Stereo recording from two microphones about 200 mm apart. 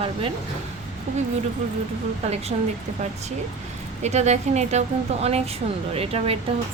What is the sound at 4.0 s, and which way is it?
A woman's voice, 35° right (ahead or behind).